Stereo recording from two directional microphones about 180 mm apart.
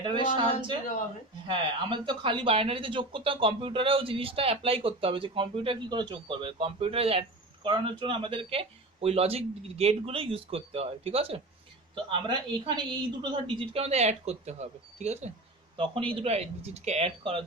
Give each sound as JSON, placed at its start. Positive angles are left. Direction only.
{"t": 1.5, "sound": "speech", "side_deg": -30}